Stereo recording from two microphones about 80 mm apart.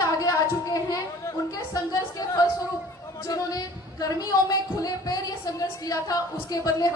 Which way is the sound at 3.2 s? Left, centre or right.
Left.